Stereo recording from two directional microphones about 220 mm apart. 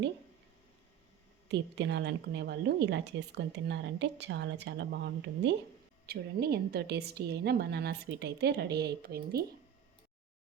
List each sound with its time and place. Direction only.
1.5 s a woman's voice: 55° right (ahead or behind)